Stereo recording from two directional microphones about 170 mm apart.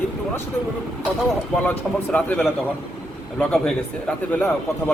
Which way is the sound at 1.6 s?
10° left (ahead or behind).